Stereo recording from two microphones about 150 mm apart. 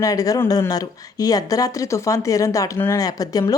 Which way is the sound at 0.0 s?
25° left (ahead or behind).